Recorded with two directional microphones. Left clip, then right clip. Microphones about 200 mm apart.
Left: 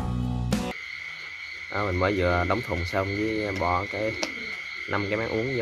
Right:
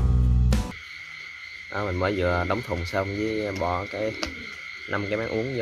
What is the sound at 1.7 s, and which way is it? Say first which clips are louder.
Speech: left 1 dB; 10° right (ahead or behind).